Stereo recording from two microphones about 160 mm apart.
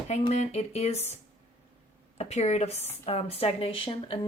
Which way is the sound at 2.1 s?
45° left (ahead or behind).